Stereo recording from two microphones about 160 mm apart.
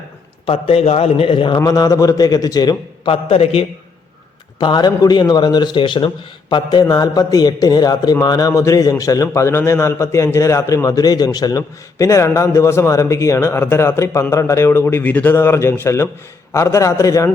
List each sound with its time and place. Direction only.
0.4 s a man's voice: 40° left (ahead or behind)
4.6 s a man's voice: 25° left (ahead or behind)